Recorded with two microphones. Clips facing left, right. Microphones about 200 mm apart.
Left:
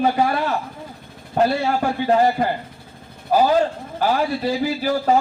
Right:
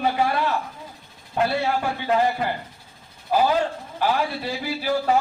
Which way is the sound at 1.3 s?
40° left (ahead or behind).